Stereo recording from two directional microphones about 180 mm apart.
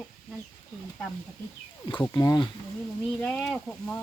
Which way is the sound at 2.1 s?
20° left (ahead or behind).